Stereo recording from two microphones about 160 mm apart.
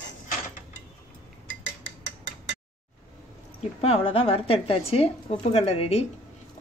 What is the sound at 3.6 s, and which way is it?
A woman's voice, 40° left (ahead or behind).